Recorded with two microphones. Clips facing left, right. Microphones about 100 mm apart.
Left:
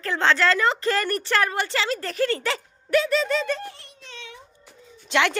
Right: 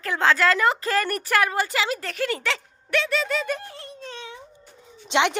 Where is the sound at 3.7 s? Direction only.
35° right (ahead or behind).